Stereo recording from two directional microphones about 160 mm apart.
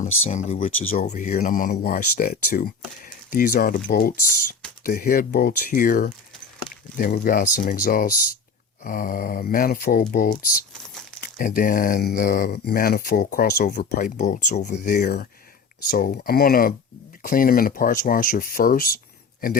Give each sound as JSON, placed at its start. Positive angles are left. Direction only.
{"t": 0.0, "sound": "speech", "side_deg": 50}
{"t": 14.0, "sound": "speech", "side_deg": 50}
{"t": 14.8, "sound": "speech", "side_deg": 85}
{"t": 15.9, "sound": "speech", "side_deg": 65}